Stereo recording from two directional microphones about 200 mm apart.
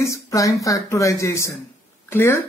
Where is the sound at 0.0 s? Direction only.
15° left (ahead or behind).